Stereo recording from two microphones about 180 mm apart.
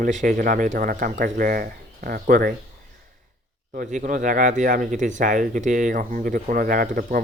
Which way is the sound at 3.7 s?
45° right (ahead or behind).